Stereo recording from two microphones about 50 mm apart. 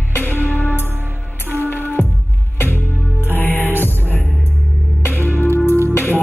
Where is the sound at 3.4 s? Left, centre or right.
Left.